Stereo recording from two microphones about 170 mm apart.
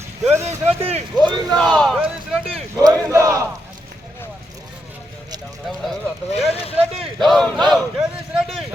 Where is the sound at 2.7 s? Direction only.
20° right (ahead or behind).